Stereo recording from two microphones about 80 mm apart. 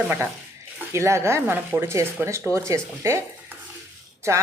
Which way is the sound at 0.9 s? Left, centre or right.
Right.